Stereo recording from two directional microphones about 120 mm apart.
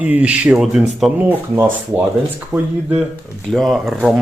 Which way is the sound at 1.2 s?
15° right (ahead or behind).